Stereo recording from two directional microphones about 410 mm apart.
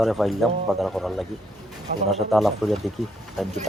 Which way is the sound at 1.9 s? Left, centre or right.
Centre.